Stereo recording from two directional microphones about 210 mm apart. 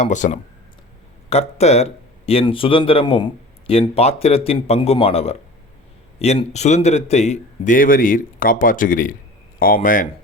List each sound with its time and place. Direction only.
0.0 s a man's voice: 35° left (ahead or behind)